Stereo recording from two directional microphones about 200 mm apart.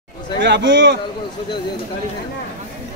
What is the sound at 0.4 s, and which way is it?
Speech, 65° right (ahead or behind).